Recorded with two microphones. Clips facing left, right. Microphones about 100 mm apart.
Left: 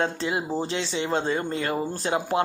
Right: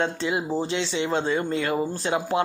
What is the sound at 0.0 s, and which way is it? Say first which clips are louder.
Speech: right 1 dB; 40° left (ahead or behind).